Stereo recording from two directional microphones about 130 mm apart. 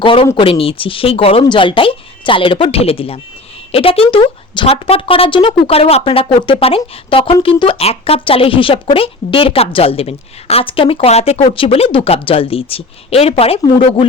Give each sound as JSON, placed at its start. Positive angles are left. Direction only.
{"t": 0.0, "sound": "speech", "side_deg": 40}